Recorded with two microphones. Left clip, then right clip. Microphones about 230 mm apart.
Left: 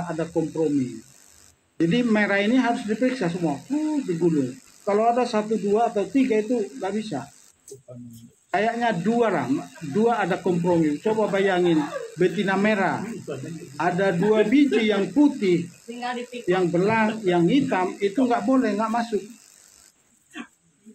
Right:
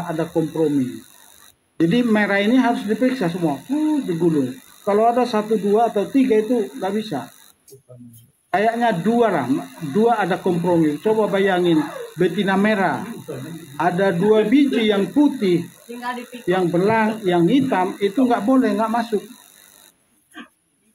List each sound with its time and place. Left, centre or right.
0.0 s speech: right
8.5 s speech: right